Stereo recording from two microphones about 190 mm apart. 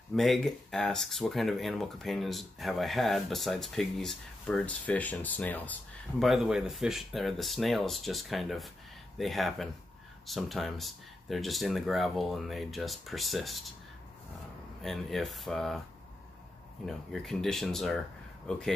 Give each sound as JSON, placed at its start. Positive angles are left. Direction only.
{"t": 0.1, "sound": "speech", "side_deg": 0}
{"t": 14.8, "sound": "speech", "side_deg": 0}
{"t": 16.8, "sound": "speech", "side_deg": 0}